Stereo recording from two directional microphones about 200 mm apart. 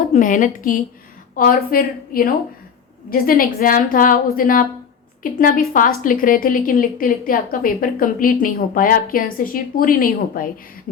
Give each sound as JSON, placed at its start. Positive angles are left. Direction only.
{"t": 0.1, "sound": "a woman's voice", "side_deg": 35}